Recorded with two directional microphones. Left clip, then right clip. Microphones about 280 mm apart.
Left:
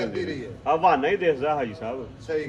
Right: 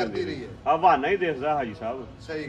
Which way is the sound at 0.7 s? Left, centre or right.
Right.